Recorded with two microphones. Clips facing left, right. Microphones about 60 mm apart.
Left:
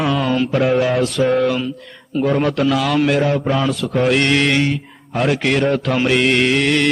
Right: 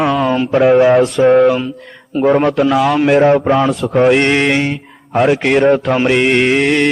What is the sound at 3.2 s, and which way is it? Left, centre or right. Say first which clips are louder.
Speech: right 8 dB; right.